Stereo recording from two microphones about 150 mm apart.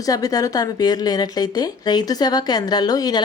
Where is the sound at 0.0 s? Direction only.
25° left (ahead or behind).